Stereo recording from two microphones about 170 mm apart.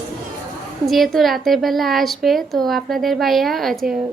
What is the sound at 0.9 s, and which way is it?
A woman's voice, centre (ahead or behind).